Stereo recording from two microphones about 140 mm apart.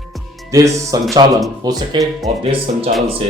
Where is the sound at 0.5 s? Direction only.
25° right (ahead or behind).